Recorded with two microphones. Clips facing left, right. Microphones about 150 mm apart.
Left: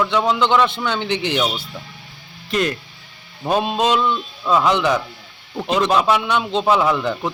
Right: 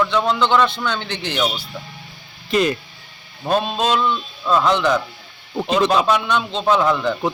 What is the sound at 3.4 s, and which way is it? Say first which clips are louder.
Speech: left 1 dB; 10° left (ahead or behind).